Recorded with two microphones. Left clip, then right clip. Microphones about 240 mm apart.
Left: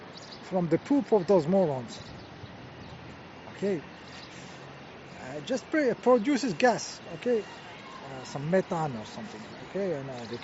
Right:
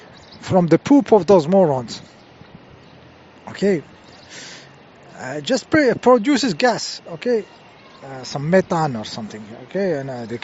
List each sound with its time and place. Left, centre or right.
0.4 s speech: right
5.2 s speech: right